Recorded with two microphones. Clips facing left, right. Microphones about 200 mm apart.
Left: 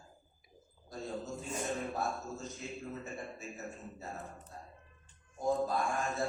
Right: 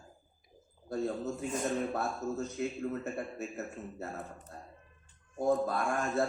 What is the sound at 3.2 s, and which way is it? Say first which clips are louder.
Speech: right 6 dB; 60° right (ahead or behind).